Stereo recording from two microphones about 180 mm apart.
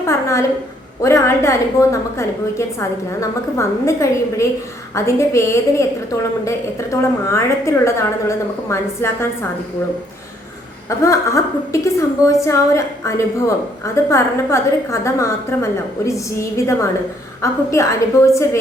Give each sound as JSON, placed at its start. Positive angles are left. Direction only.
{"t": 0.1, "sound": "a sound", "side_deg": 15}
{"t": 1.0, "sound": "a woman's voice", "side_deg": 15}
{"t": 10.8, "sound": "a woman's voice", "side_deg": 15}